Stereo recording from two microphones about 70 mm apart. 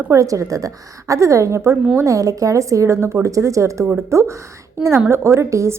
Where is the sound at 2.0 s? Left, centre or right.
Right.